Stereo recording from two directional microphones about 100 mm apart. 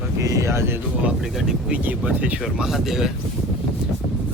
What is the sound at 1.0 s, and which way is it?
Speech, 5° right (ahead or behind).